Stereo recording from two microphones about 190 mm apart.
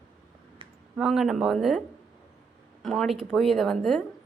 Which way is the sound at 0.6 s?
25° right (ahead or behind).